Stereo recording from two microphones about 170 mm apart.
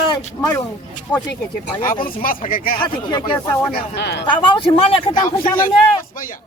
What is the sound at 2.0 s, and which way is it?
Speech, 55° left (ahead or behind).